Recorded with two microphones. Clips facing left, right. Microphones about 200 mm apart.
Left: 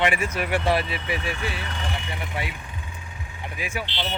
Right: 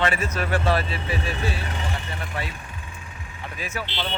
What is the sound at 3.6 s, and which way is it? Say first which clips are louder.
Speech: even; 15° left (ahead or behind).